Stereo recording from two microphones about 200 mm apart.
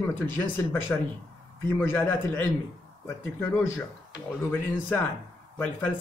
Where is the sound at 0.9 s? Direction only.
10° left (ahead or behind).